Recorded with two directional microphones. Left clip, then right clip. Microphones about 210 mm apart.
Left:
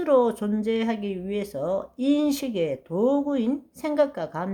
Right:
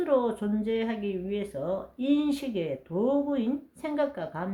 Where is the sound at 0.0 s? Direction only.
40° left (ahead or behind).